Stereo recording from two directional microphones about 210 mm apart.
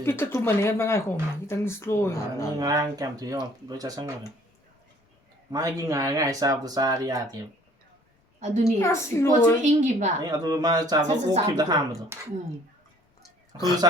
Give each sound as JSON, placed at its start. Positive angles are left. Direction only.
{"t": 0.0, "sound": "speech", "side_deg": 10}
{"t": 2.6, "sound": "speech", "side_deg": -15}
{"t": 5.5, "sound": "speech", "side_deg": -15}
{"t": 8.4, "sound": "a woman's voice", "side_deg": -35}
{"t": 8.8, "sound": "speech", "side_deg": 15}
{"t": 9.6, "sound": "a woman's voice", "side_deg": -35}
{"t": 10.2, "sound": "speech", "side_deg": -20}
{"t": 13.5, "sound": "a woman's voice", "side_deg": -20}